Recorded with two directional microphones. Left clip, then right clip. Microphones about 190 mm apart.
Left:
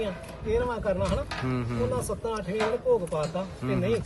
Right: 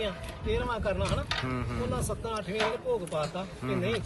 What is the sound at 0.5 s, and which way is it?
Speech, centre (ahead or behind).